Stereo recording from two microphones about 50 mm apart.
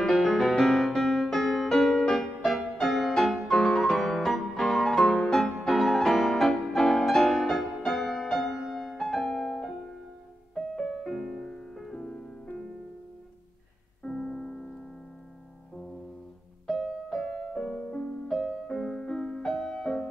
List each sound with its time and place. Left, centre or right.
0.0 s music: centre
12.0 s music: centre
14.0 s music: centre
16.7 s music: centre